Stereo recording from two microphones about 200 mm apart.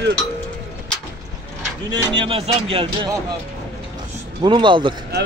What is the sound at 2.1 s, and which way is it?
A man's voice, 25° right (ahead or behind).